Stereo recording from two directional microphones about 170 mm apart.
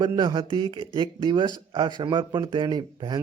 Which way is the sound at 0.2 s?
25° right (ahead or behind).